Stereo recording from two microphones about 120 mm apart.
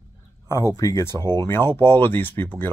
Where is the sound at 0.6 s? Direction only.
25° left (ahead or behind).